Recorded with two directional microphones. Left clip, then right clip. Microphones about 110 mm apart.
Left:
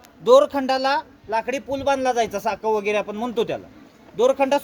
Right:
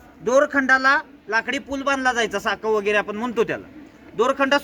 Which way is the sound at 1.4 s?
40° left (ahead or behind).